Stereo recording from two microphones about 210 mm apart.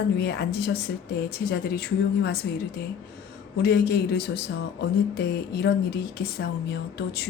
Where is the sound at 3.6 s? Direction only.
50° left (ahead or behind).